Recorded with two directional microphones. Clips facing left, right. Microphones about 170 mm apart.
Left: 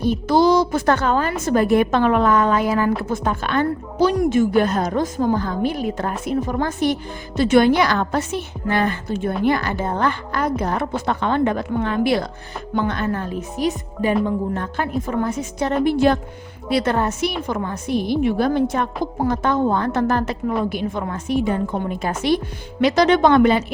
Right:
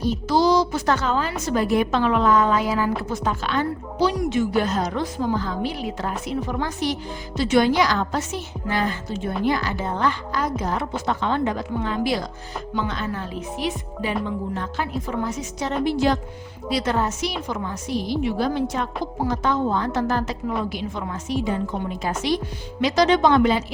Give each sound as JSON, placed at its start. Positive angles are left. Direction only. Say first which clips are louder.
{"t": 0.0, "sound": "a woman's voice", "louder": "left 4 dB", "side_deg": 55}